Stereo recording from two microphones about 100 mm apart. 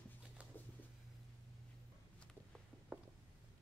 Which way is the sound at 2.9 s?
15° right (ahead or behind).